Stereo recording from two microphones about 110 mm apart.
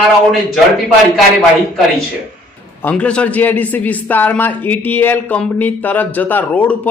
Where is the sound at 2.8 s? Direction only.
10° left (ahead or behind).